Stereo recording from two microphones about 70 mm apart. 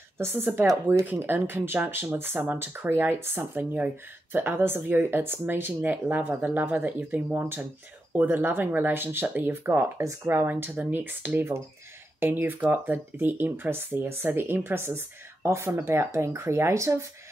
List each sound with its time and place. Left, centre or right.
0.2 s a woman's voice: right